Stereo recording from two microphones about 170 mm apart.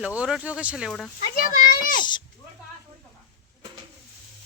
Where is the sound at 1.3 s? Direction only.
55° left (ahead or behind).